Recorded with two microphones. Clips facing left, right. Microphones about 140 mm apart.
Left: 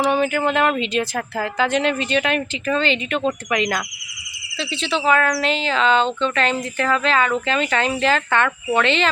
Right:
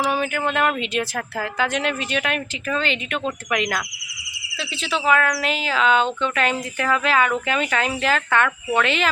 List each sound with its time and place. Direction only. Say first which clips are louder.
0.0 s speech: left 4 dB; centre (ahead or behind)